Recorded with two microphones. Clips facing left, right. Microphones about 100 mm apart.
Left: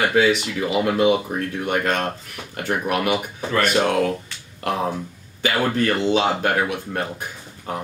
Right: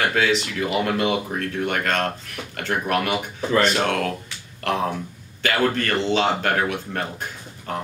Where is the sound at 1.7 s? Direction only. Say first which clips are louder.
Left 3 dB; 15° left (ahead or behind).